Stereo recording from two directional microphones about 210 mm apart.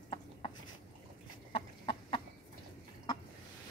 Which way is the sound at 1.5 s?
25° left (ahead or behind).